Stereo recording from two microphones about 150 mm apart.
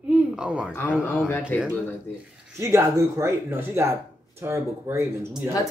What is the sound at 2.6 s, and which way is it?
Speech, 20° right (ahead or behind).